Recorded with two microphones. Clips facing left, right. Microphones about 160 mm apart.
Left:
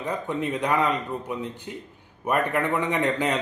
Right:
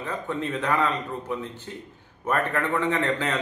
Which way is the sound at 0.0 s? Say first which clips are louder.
Left 2 dB; 15° left (ahead or behind).